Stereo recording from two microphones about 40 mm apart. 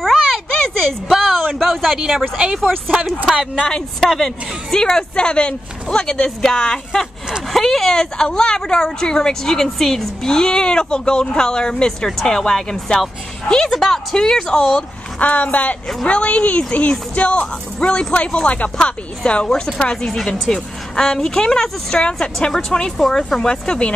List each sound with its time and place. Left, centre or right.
0.0 s a sound: centre
2.0 s speech: centre
3.5 s speech: centre
4.8 s speech: left
12.2 s speech: centre
14.8 s a woman's voice: left; by 23.4 s centre
23.4 s speech: centre